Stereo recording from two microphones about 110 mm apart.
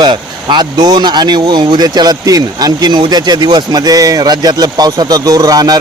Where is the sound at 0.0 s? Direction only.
45° right (ahead or behind).